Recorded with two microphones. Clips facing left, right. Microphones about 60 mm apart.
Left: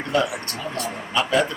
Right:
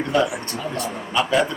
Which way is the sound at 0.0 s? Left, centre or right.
Right.